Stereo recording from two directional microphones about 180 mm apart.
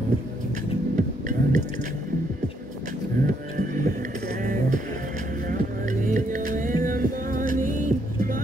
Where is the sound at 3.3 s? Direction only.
50° right (ahead or behind).